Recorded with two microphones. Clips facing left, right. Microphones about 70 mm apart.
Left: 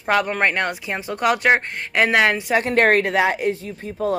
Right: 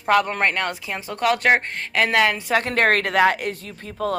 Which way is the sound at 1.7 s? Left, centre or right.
Centre.